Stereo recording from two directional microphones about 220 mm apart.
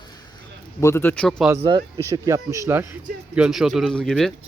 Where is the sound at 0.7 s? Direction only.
10° left (ahead or behind).